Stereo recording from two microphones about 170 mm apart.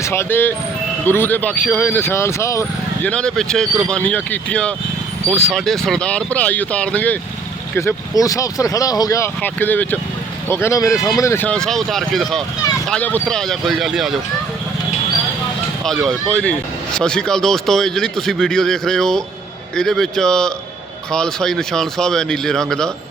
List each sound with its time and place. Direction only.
0.0 s speech: 15° left (ahead or behind)
3.1 s speech: 5° left (ahead or behind)
16.0 s speech: 5° left (ahead or behind)